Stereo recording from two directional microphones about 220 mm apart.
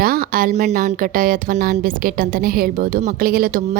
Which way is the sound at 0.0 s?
40° right (ahead or behind).